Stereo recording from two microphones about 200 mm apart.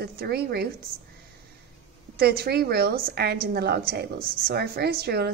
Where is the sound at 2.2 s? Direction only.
50° right (ahead or behind).